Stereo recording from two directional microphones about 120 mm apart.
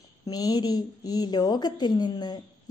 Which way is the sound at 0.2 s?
35° left (ahead or behind).